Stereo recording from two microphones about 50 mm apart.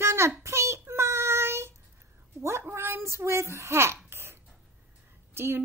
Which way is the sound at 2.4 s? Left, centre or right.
Right.